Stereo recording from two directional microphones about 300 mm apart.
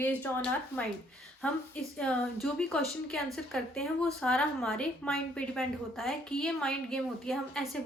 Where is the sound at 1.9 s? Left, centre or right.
Centre.